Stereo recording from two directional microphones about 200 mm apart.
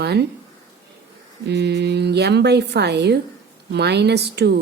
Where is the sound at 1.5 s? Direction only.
60° right (ahead or behind).